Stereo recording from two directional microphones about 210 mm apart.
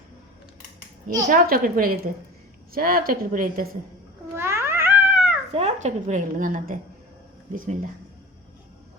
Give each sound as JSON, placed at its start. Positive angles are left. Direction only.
{"t": 1.3, "sound": "speech", "side_deg": -45}
{"t": 4.4, "sound": "cat", "side_deg": -10}
{"t": 5.5, "sound": "a woman's voice", "side_deg": -35}